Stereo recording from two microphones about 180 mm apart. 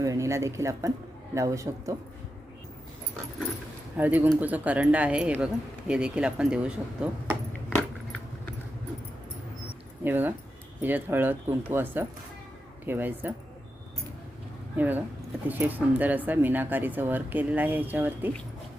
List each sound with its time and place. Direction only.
0.0 s a man's voice: 15° right (ahead or behind)
3.9 s speech: 10° right (ahead or behind)
10.0 s speech: 10° right (ahead or behind)
14.8 s speech: 10° right (ahead or behind)